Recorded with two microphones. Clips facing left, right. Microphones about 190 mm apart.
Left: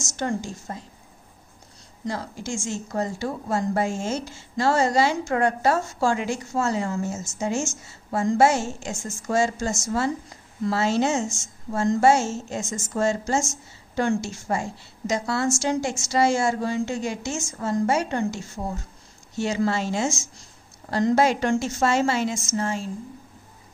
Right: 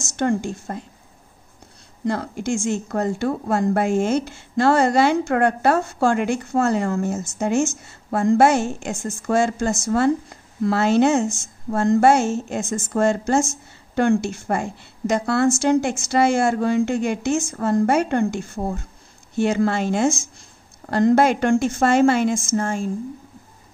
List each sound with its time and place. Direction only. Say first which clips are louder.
0.0 s a woman's voice: right 6 dB; 60° right (ahead or behind)
2.0 s speech: right 7 dB; 60° right (ahead or behind)